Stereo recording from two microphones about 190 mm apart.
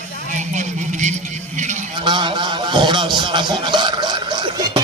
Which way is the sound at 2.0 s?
25° right (ahead or behind).